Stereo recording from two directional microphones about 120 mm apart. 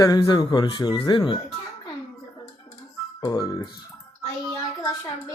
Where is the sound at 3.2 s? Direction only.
30° left (ahead or behind).